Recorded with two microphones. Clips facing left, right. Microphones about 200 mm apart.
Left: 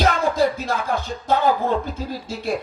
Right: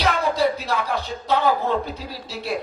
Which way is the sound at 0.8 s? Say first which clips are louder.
Left 2 dB; 45° left (ahead or behind).